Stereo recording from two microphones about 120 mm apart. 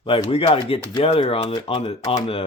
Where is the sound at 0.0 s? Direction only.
50° left (ahead or behind).